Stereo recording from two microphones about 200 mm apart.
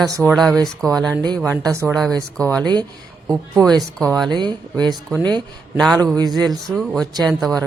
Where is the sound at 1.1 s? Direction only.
20° right (ahead or behind).